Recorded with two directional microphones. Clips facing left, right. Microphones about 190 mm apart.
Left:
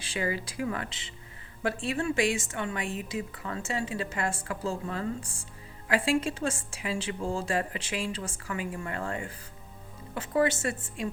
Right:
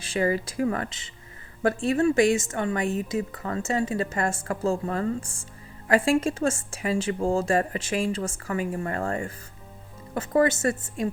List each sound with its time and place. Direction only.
0.0 s a woman's voice: 45° right (ahead or behind)